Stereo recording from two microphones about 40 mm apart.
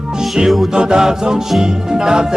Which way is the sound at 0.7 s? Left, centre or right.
Centre.